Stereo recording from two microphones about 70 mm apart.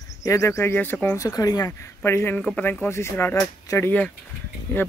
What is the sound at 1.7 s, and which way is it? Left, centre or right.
Speech, left.